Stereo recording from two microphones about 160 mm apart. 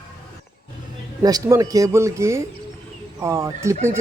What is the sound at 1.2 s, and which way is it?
Speech, 20° right (ahead or behind).